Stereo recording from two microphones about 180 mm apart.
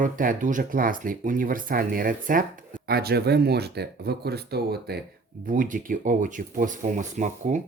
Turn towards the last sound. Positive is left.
turn(degrees=-45)  # may be behind; listen again after turning